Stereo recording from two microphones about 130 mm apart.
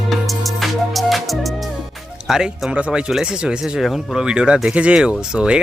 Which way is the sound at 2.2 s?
5° right (ahead or behind).